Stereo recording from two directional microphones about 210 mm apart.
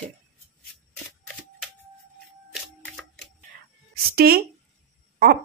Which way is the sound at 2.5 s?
Centre (ahead or behind).